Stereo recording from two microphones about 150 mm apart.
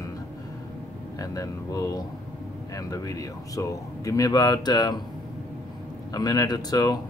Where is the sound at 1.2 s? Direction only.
25° left (ahead or behind).